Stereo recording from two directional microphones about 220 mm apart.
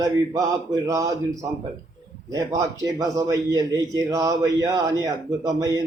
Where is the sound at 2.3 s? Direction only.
15° right (ahead or behind).